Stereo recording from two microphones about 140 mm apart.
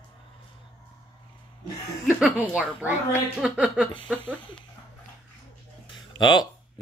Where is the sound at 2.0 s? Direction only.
10° right (ahead or behind).